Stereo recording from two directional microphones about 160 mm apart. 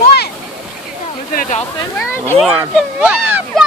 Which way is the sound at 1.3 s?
60° left (ahead or behind).